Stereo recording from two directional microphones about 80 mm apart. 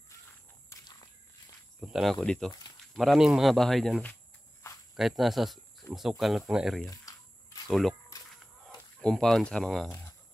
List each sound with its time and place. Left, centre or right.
0.7 s walk: left
1.8 s speech: centre
6.9 s a sound: left
7.6 s speech: centre
8.1 s a sound: left
8.6 s speech: centre